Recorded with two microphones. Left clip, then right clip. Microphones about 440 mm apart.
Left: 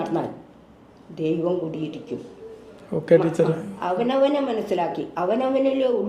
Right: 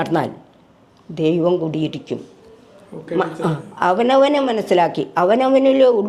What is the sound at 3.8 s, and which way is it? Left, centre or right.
Speech, right.